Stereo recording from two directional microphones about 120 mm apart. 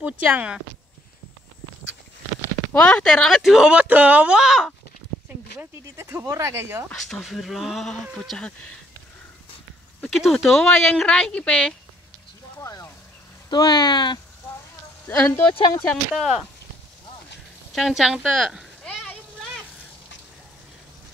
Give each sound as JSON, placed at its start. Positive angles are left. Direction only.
{"t": 0.0, "sound": "speech", "side_deg": -10}
{"t": 2.7, "sound": "speech", "side_deg": 5}
{"t": 5.6, "sound": "speech", "side_deg": -20}
{"t": 6.9, "sound": "speech", "side_deg": 0}
{"t": 10.0, "sound": "speech", "side_deg": 0}
{"t": 12.5, "sound": "a sound", "side_deg": 25}
{"t": 13.5, "sound": "speech", "side_deg": 35}
{"t": 15.0, "sound": "speech", "side_deg": 15}
{"t": 15.9, "sound": "speech", "side_deg": 0}
{"t": 17.7, "sound": "speech", "side_deg": 0}